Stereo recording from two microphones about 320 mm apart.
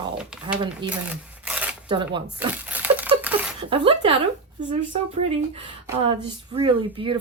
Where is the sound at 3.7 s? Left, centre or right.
Centre.